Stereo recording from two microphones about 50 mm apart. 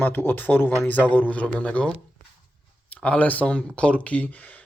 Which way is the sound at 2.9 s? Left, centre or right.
Left.